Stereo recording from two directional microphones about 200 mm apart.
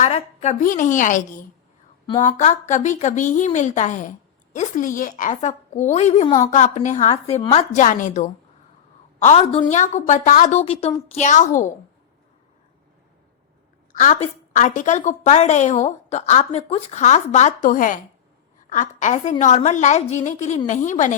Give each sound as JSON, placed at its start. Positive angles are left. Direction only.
{"t": 0.0, "sound": "a woman's voice", "side_deg": 35}
{"t": 2.0, "sound": "speech", "side_deg": 15}
{"t": 2.4, "sound": "a woman's voice", "side_deg": 35}
{"t": 13.9, "sound": "a woman's voice", "side_deg": 35}